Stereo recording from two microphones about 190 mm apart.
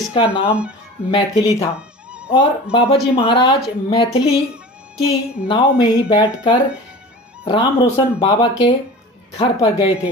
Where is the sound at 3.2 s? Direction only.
30° left (ahead or behind).